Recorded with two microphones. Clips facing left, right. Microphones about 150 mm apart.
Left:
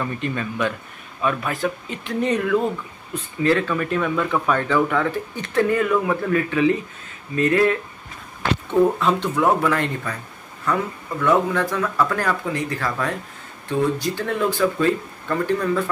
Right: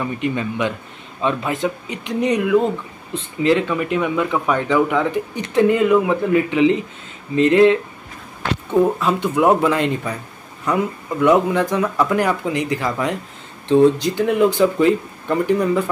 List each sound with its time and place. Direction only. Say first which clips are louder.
0.0 s speech: right 4 dB; 15° right (ahead or behind)
9.0 s speech: right 3 dB; 10° right (ahead or behind)